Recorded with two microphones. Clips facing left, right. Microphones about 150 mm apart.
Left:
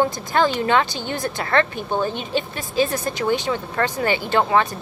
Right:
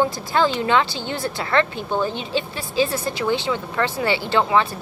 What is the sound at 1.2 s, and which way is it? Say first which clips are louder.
A woman's voice: even; 50° left (ahead or behind).